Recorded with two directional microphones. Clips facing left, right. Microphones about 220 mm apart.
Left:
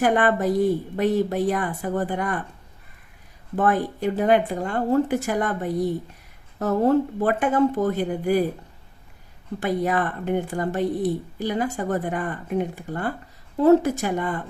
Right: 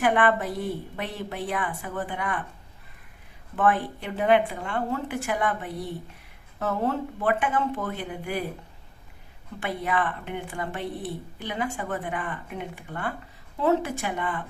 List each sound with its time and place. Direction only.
0.0 s speech: 40° left (ahead or behind)
3.5 s speech: 40° left (ahead or behind)
9.6 s speech: 40° left (ahead or behind)